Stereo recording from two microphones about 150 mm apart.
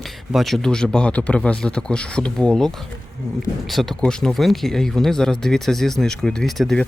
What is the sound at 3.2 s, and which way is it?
Speech, 25° left (ahead or behind).